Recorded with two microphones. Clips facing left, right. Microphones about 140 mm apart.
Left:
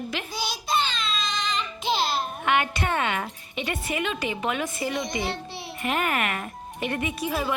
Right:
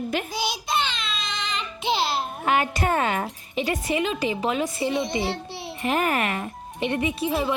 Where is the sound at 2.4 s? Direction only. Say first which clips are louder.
Right 2 dB; 35° right (ahead or behind).